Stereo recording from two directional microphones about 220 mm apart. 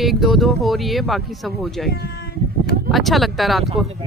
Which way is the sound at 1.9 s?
45° left (ahead or behind).